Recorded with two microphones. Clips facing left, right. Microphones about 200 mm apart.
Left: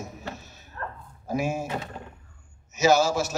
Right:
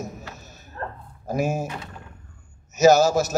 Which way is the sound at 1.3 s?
40° right (ahead or behind).